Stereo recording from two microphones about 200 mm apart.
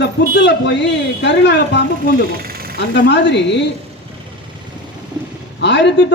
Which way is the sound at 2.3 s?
50° right (ahead or behind).